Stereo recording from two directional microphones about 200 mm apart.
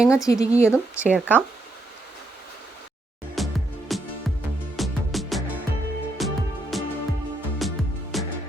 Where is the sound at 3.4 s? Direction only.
Centre (ahead or behind).